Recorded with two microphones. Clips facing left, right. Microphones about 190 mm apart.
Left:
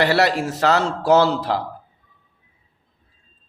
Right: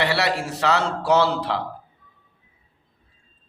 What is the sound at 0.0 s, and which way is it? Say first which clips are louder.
A man's voice: left 5 dB; 45° left (ahead or behind).